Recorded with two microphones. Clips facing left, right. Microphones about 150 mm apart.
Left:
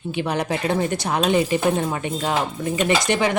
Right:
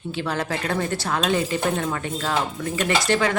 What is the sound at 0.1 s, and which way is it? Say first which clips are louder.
A woman's voice: left 3 dB; 20° left (ahead or behind).